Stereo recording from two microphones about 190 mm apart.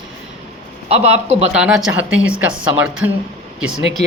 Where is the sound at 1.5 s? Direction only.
5° right (ahead or behind).